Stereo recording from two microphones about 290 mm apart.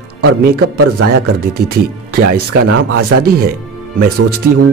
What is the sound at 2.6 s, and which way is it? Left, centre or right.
Speech, right.